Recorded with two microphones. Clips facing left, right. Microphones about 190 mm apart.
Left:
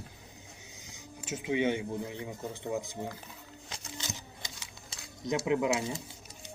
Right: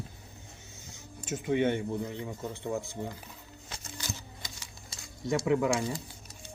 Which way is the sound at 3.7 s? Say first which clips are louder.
Right 1 dB; 20° left (ahead or behind).